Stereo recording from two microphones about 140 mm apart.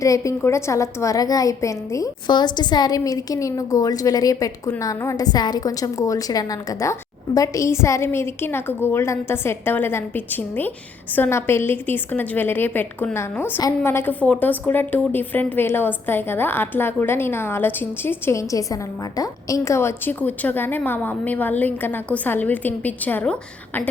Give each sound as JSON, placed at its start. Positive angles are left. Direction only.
{"t": 0.0, "sound": "a woman's voice", "side_deg": 20}